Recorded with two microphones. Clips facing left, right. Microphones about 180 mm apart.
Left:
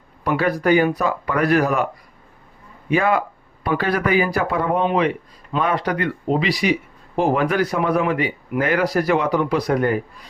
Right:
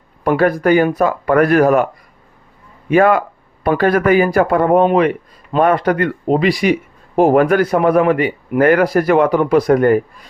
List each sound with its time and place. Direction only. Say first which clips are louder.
0.3 s a man's voice: right 5 dB; 50° right (ahead or behind)
2.9 s a man's voice: right 7 dB; 55° right (ahead or behind)